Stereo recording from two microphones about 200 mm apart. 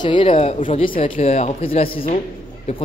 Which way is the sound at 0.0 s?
25° left (ahead or behind).